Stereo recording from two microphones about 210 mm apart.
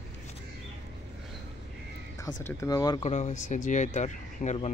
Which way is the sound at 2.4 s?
15° left (ahead or behind).